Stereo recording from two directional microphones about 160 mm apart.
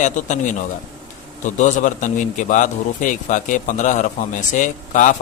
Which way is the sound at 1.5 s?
50° left (ahead or behind).